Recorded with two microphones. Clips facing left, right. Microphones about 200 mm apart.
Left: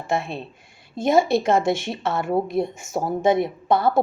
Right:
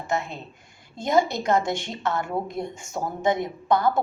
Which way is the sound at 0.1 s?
30° left (ahead or behind).